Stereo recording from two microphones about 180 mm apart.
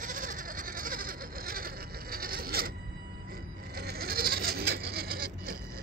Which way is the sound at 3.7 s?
60° right (ahead or behind).